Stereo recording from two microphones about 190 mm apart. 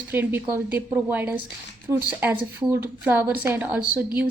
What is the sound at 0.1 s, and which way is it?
Speech, 10° right (ahead or behind).